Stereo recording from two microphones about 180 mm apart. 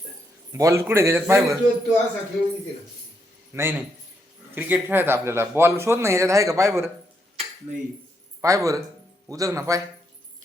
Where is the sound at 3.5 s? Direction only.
15° right (ahead or behind).